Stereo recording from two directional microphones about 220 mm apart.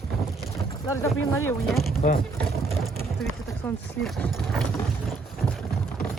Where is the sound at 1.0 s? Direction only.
10° left (ahead or behind).